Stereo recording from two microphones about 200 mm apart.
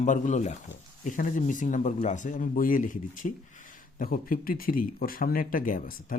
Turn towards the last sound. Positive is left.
turn(degrees=45)  # may be behind; listen again after turning